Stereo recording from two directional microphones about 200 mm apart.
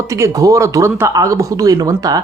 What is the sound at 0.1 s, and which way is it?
Speech, 15° right (ahead or behind).